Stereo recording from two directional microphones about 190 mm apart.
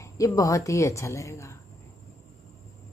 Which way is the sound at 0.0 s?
15° left (ahead or behind).